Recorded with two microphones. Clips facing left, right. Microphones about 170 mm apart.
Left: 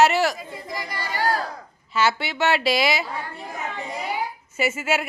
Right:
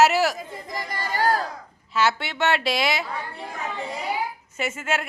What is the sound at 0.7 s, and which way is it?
Chatter, 45° right (ahead or behind).